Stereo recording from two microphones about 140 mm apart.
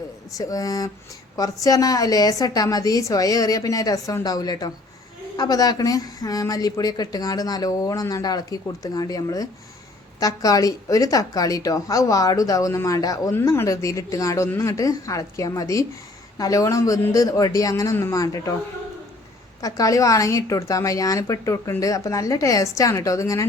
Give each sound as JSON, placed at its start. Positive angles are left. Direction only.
{"t": 0.3, "sound": "speech", "side_deg": 25}
{"t": 19.6, "sound": "speech", "side_deg": 25}